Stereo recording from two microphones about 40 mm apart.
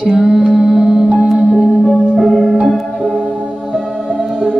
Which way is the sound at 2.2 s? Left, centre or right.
Centre.